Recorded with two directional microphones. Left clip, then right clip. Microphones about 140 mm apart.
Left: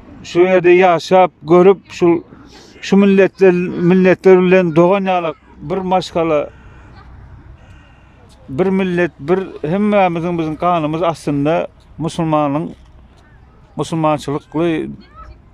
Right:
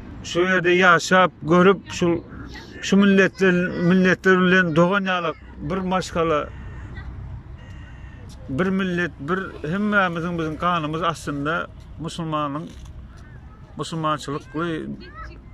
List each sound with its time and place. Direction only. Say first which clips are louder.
0.2 s a man's voice: left 8 dB; 35° left (ahead or behind)
8.5 s a man's voice: left 8 dB; 35° left (ahead or behind)
13.7 s speech: left 8 dB; 45° left (ahead or behind)